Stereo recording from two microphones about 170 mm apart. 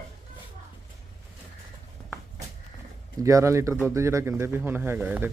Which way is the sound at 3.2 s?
20° right (ahead or behind).